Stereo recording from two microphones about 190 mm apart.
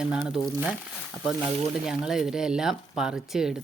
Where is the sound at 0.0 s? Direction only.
5° right (ahead or behind).